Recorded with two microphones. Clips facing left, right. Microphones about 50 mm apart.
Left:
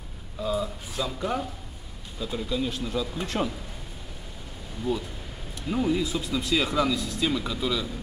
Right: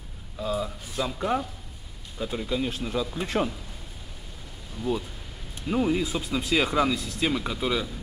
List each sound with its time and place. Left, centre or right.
0.4 s speech: centre
0.9 s speech: right
5.7 s speech: right